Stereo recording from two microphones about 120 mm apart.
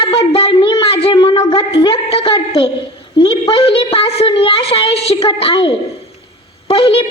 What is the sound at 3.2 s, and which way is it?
A woman's voice, 50° left (ahead or behind).